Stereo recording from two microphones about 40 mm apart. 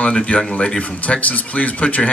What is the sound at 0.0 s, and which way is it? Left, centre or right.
Speech, left.